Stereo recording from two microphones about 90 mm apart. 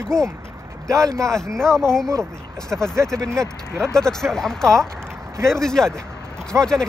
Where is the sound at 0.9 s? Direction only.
35° right (ahead or behind).